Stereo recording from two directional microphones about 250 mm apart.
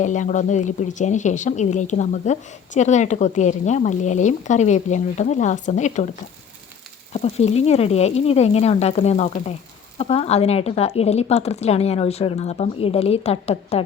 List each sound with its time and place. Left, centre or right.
0.0 s a woman's voice: left
7.1 s a woman's voice: left